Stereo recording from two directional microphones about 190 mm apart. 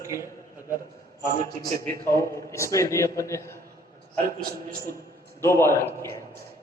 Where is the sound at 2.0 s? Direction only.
15° left (ahead or behind).